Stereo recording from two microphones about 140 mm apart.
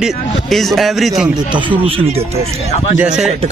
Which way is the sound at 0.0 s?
Centre (ahead or behind).